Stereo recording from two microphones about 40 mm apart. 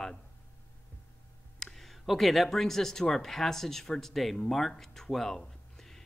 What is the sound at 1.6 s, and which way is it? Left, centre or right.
Speech, centre.